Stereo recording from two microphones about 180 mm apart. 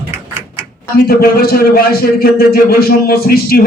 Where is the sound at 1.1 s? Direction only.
60° left (ahead or behind).